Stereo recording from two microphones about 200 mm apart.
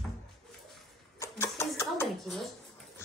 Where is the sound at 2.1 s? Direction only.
Centre (ahead or behind).